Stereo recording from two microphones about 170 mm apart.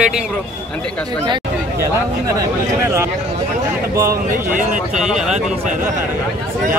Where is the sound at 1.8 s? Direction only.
20° right (ahead or behind).